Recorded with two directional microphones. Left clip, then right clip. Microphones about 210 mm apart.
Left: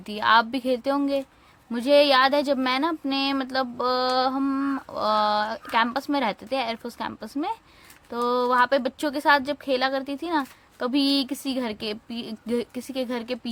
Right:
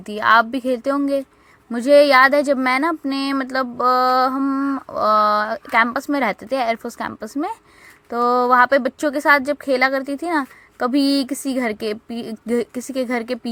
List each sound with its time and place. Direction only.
0.1 s speech: 15° right (ahead or behind)
12.0 s speech: 45° right (ahead or behind)
12.5 s speech: 20° right (ahead or behind)